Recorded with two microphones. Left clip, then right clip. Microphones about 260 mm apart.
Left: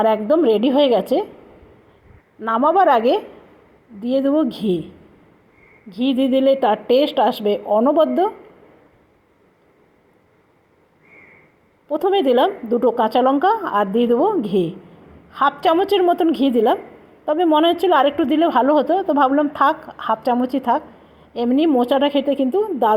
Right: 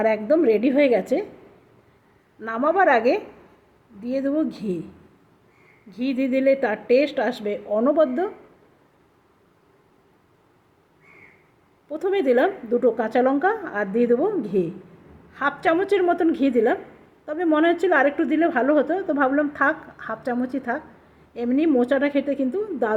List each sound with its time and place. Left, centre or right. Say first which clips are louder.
0.3 s a woman's voice: left 3 dB; centre
2.4 s a woman's voice: left 5 dB; centre
4.3 s a woman's voice: left 6 dB; centre
6.0 s speech: left 6 dB; left
6.5 s a woman's voice: left 5 dB; centre
6.9 s speech: even; left
7.4 s a woman's voice: left 5 dB; centre
11.9 s a woman's voice: left 5 dB; centre